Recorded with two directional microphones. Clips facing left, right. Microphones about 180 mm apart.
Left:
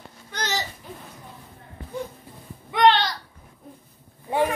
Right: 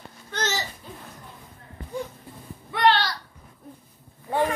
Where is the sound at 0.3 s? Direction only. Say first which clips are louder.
Right 1 dB; 15° left (ahead or behind).